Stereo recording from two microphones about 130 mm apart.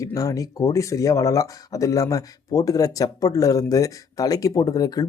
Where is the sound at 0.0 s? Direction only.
25° left (ahead or behind).